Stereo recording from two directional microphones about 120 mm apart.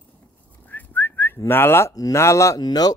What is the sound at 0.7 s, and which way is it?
Speech, 15° left (ahead or behind).